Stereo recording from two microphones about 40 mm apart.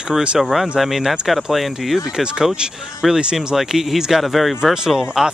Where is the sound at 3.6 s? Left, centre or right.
Centre.